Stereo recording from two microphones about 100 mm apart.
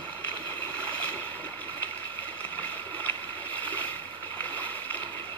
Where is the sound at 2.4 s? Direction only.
20° left (ahead or behind).